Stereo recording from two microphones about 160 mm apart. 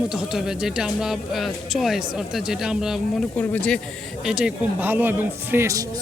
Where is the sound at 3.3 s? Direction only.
10° left (ahead or behind).